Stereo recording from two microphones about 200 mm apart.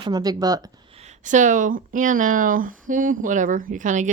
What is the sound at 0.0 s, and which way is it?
Speech, 20° right (ahead or behind).